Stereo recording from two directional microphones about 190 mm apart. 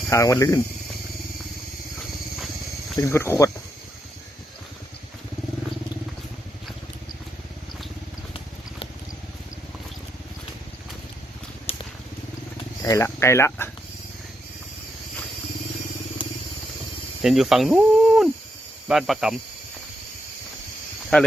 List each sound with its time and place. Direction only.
0.1 s speech: 15° left (ahead or behind)
3.0 s speech: 15° left (ahead or behind)
11.7 s a sound: 30° left (ahead or behind)
12.8 s speech: 15° left (ahead or behind)
17.2 s speech: centre (ahead or behind)
21.1 s speech: 10° left (ahead or behind)